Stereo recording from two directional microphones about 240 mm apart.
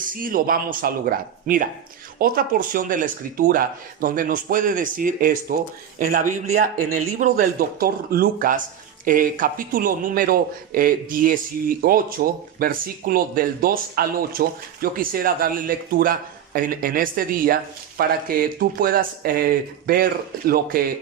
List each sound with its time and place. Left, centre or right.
0.1 s speech: right